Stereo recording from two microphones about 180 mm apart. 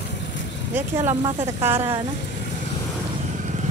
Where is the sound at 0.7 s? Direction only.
10° right (ahead or behind).